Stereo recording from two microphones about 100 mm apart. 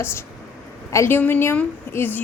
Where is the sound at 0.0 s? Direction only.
25° left (ahead or behind).